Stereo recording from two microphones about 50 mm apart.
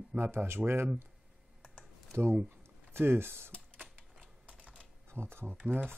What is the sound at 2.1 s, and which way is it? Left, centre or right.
Speech, right.